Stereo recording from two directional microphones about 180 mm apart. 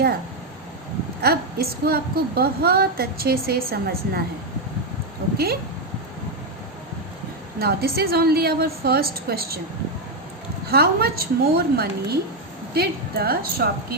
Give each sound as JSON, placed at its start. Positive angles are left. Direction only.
{"t": 1.2, "sound": "a woman's voice", "side_deg": -60}
{"t": 7.6, "sound": "a woman's voice", "side_deg": -60}
{"t": 10.7, "sound": "a woman's voice", "side_deg": -60}